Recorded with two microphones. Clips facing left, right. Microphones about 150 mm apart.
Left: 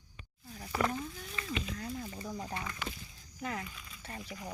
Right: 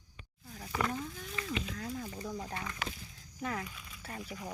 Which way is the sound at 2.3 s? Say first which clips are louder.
Left 2 dB; 15° left (ahead or behind).